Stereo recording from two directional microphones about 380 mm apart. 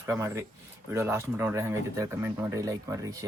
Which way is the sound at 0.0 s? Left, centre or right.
Centre.